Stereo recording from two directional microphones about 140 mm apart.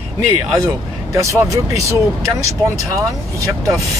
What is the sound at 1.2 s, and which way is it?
Speech, 20° right (ahead or behind).